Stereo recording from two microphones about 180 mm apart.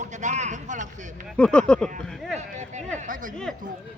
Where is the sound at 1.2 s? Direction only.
5° left (ahead or behind).